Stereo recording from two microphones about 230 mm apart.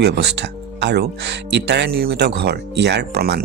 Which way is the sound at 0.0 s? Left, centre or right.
Right.